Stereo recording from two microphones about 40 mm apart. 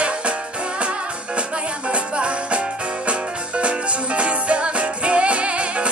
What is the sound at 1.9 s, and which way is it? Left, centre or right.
Music, right.